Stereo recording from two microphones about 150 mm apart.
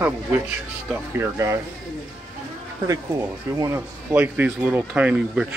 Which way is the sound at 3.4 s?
20° right (ahead or behind).